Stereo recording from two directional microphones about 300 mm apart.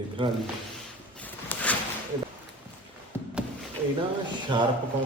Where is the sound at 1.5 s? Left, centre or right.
Centre.